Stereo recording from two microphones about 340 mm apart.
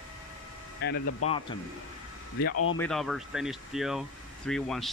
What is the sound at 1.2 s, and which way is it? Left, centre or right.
Speech, centre.